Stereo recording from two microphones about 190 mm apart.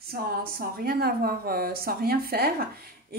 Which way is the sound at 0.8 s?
55° right (ahead or behind).